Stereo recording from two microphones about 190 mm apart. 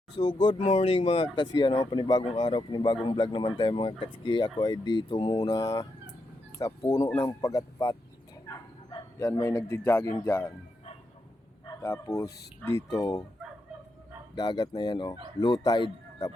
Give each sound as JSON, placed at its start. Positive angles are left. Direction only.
{"t": 0.2, "sound": "speech", "side_deg": 25}
{"t": 0.6, "sound": "speech", "side_deg": 35}
{"t": 11.6, "sound": "speech", "side_deg": 15}
{"t": 14.3, "sound": "speech", "side_deg": 20}